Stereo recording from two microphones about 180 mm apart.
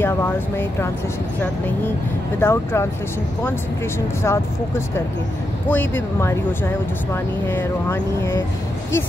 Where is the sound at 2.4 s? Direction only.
15° left (ahead or behind).